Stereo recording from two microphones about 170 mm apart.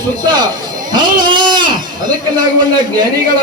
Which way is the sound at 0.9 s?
25° right (ahead or behind).